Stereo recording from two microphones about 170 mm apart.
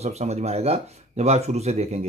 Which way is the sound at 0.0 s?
40° right (ahead or behind).